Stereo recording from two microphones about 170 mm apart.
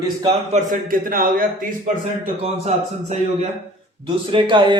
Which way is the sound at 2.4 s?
40° right (ahead or behind).